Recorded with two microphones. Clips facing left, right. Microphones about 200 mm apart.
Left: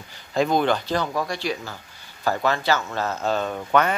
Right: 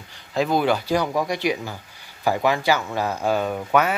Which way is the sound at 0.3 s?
5° right (ahead or behind).